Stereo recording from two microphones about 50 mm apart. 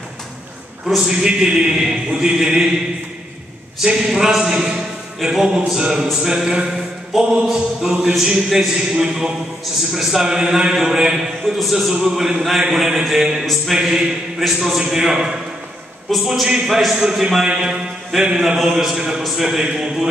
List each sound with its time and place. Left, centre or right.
1.0 s speech: centre
3.8 s a man's voice: centre
11.5 s a sound: centre
11.9 s speech: centre
17.5 s music: centre
18.1 s speech: centre